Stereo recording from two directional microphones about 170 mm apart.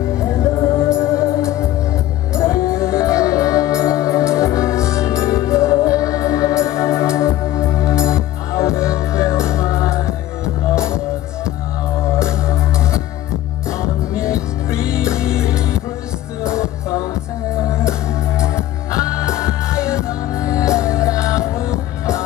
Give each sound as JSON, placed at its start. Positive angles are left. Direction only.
{"t": 0.1, "sound": "music", "side_deg": 15}
{"t": 12.1, "sound": "music", "side_deg": 15}